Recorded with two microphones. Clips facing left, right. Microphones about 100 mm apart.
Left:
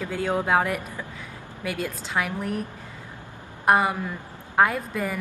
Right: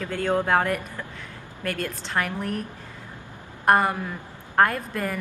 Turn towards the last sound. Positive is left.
turn(degrees=5)  # may be behind; listen again after turning